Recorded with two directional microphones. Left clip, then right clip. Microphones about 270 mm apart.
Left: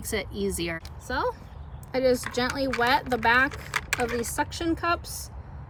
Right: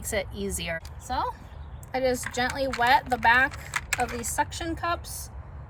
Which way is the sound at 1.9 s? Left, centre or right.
Centre.